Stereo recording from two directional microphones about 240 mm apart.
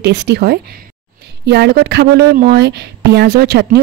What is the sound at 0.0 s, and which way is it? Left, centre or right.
Speech, right.